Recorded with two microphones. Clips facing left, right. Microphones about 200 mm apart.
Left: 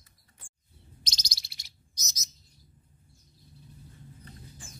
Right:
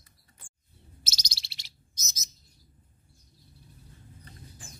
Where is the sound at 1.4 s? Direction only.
30° right (ahead or behind).